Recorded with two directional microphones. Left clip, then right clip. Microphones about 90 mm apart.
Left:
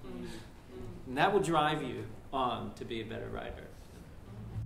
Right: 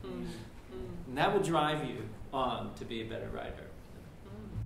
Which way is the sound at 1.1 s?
10° left (ahead or behind).